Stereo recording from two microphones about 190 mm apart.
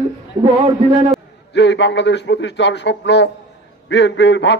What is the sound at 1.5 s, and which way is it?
A man's voice, 65° left (ahead or behind).